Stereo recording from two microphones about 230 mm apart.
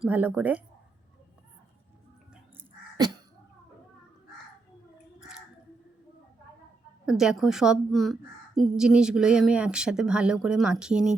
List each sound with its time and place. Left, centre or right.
0.0 s a woman's voice: centre
3.0 s sneeze: centre
7.0 s a woman's voice: centre